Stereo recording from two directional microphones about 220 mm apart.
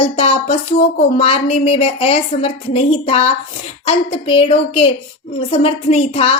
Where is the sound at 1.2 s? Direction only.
25° left (ahead or behind).